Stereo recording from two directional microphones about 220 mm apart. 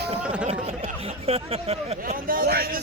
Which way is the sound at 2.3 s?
45° right (ahead or behind).